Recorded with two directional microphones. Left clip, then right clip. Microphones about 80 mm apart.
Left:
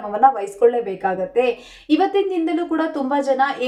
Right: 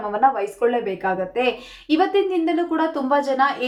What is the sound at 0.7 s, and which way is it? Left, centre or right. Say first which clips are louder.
A woman's voice: left 2 dB; left.